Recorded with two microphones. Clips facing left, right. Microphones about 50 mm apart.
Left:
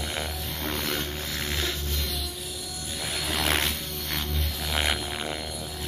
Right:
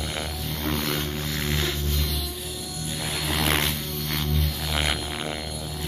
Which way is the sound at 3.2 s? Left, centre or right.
Centre.